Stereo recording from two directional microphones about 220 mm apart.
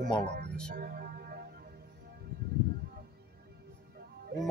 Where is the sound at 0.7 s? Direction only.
45° right (ahead or behind).